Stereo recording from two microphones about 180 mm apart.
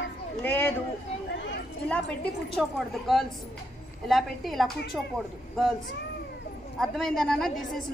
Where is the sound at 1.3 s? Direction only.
80° left.